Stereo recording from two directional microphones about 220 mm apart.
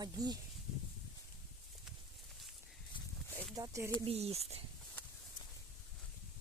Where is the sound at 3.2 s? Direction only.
10° left (ahead or behind).